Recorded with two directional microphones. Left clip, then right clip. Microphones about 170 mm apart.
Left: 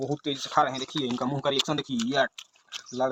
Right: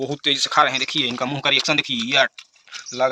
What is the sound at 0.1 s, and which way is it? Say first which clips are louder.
Speech: right 10 dB; centre (ahead or behind).